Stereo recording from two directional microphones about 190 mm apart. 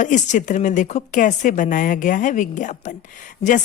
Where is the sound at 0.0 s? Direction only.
40° left (ahead or behind).